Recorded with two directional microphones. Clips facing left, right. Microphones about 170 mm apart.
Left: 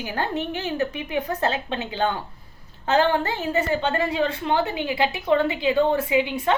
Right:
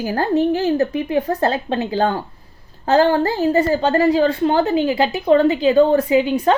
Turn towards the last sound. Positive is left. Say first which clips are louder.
# right 6 dB
turn(degrees=-40)  # may be behind; listen again after turning